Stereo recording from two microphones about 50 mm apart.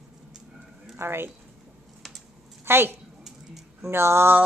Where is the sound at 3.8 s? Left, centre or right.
Right.